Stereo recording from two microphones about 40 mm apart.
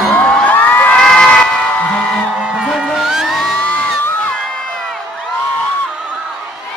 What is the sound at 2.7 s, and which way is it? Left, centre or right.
Music, centre.